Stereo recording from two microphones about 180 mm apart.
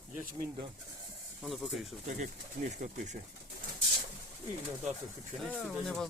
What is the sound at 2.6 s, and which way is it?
Speech, 50° right (ahead or behind).